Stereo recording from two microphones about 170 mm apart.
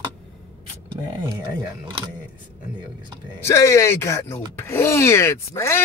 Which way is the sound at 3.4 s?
15° left (ahead or behind).